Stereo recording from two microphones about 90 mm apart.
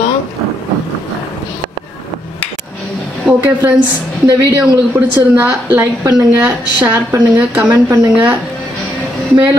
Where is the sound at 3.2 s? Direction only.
20° right (ahead or behind).